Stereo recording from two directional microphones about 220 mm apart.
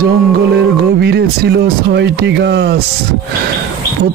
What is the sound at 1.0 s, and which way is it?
Speech, 50° right (ahead or behind).